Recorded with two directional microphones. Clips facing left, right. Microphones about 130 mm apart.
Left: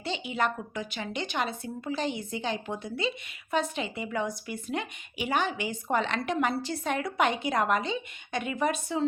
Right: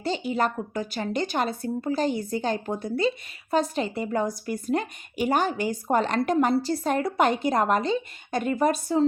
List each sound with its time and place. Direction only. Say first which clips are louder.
0.0 s speech: right 4 dB; 40° right (ahead or behind)